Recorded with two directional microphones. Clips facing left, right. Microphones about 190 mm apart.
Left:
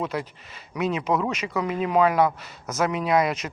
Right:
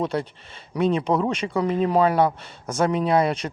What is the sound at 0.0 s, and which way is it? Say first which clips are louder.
Speech: right 4 dB; 30° right (ahead or behind).